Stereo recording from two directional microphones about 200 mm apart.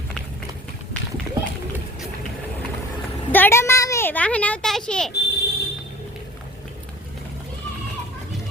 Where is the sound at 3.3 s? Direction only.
10° left (ahead or behind).